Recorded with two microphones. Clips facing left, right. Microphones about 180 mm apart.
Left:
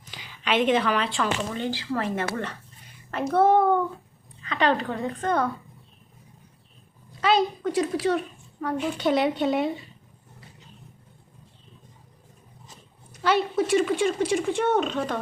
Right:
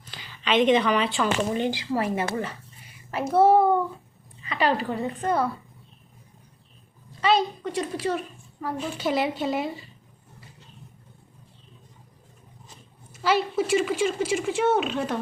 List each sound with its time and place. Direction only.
0.1 s speech: 10° left (ahead or behind)
1.5 s speech: 15° right (ahead or behind)
7.2 s speech: centre (ahead or behind)
13.2 s speech: centre (ahead or behind)